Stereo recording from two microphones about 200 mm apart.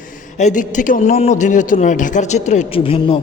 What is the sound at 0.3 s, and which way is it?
A man's voice, 35° left (ahead or behind).